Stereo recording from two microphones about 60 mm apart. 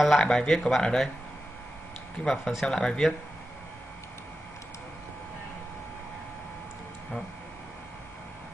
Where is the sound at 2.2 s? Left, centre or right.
Centre.